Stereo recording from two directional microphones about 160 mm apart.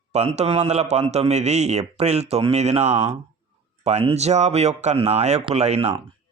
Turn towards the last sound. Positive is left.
turn(degrees=-40)  # may be behind; listen again after turning